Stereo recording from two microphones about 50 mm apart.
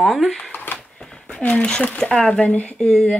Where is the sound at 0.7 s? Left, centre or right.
Left.